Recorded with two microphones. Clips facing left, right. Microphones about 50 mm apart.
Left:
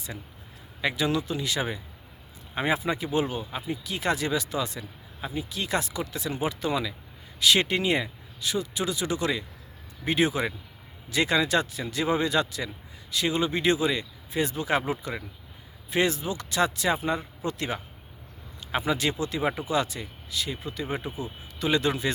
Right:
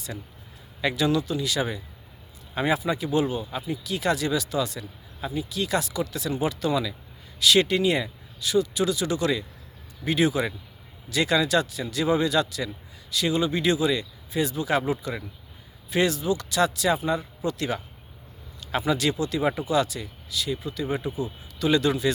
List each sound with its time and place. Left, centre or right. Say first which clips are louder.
0.8 s speech: right 3 dB; centre